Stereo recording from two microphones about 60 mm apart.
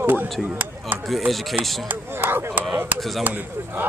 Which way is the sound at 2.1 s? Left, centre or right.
Right.